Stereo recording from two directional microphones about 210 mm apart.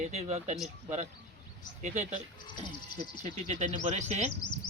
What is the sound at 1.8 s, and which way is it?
Speech, 35° right (ahead or behind).